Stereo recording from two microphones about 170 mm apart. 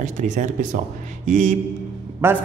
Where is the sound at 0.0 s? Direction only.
45° right (ahead or behind).